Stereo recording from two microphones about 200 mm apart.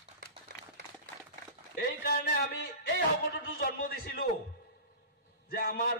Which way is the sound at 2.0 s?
50° left (ahead or behind).